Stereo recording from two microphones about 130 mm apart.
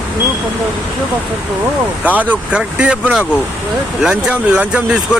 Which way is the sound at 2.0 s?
10° right (ahead or behind).